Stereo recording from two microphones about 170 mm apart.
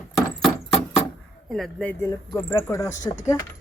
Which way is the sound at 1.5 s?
5° left (ahead or behind).